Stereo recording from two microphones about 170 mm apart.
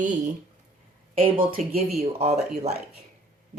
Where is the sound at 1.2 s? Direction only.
30° right (ahead or behind).